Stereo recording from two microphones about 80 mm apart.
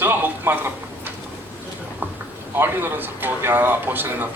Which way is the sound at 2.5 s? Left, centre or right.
Right.